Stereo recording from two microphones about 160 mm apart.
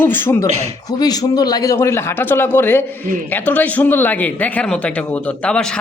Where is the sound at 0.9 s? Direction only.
25° left (ahead or behind).